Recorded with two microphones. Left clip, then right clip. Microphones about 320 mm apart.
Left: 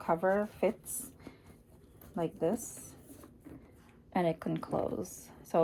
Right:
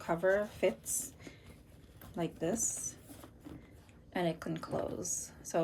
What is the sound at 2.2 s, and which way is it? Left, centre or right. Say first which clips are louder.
Speech: left 4 dB; centre.